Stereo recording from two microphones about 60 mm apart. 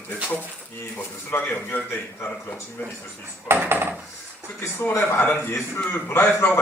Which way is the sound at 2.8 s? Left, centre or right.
Left.